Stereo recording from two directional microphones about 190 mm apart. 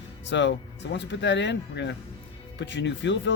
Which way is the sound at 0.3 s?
70° left (ahead or behind).